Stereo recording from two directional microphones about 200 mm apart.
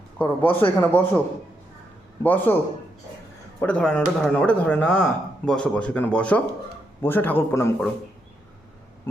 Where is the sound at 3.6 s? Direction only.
5° left (ahead or behind).